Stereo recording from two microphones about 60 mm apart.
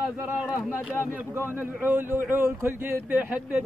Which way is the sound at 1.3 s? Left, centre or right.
Right.